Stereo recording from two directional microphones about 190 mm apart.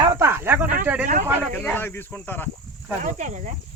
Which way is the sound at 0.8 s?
10° right (ahead or behind).